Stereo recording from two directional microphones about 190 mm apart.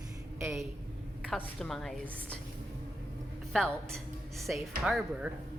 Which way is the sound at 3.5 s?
5° left (ahead or behind).